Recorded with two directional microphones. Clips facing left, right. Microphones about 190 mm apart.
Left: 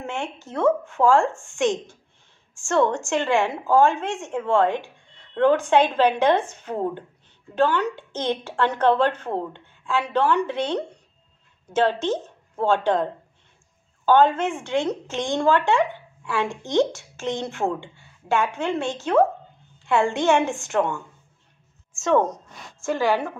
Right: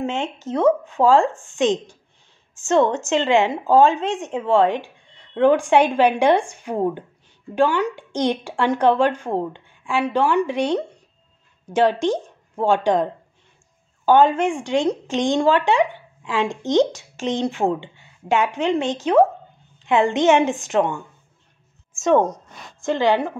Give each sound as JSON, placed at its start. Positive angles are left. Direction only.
{"t": 0.0, "sound": "a woman's voice", "side_deg": -20}
{"t": 22.8, "sound": "speech", "side_deg": -20}